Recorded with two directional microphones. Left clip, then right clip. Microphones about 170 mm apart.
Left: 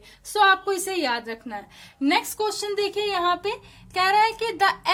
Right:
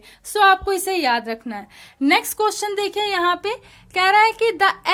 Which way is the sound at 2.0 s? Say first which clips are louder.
Right 5 dB; 40° right (ahead or behind).